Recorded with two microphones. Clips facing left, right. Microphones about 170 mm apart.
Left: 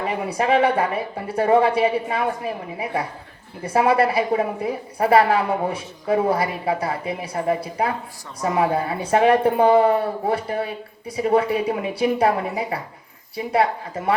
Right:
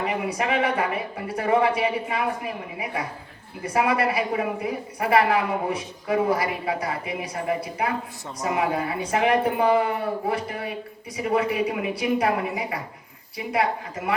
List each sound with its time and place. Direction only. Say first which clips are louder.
0.0 s a woman's voice: left 3 dB; 30° left (ahead or behind)